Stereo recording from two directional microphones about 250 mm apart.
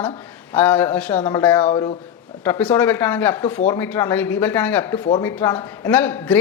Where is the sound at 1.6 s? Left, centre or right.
Left.